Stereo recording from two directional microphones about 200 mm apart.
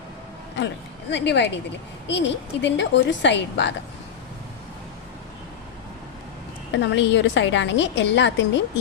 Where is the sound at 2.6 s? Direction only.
60° left (ahead or behind).